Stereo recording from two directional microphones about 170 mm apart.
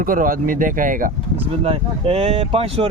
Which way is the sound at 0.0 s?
55° right (ahead or behind).